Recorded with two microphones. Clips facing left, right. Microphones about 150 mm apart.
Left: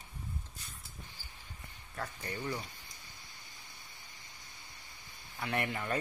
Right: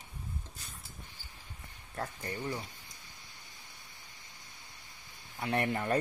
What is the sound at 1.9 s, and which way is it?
Speech, 30° right (ahead or behind).